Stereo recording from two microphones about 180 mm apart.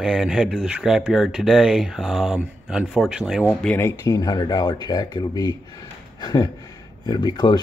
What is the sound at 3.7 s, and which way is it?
Speech, 15° left (ahead or behind).